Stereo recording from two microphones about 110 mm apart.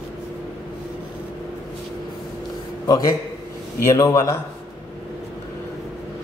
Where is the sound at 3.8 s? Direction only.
30° left (ahead or behind).